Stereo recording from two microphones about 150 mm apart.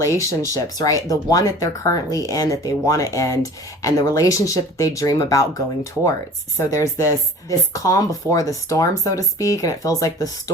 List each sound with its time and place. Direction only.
0.0 s speech: 20° left (ahead or behind)